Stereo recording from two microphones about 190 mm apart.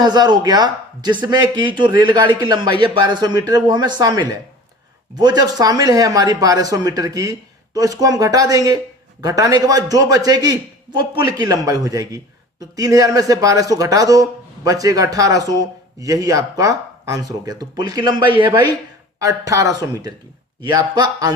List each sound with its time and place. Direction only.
0.0 s a man's voice: 20° right (ahead or behind)